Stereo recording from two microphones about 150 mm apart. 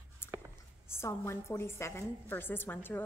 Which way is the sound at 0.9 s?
15° left (ahead or behind).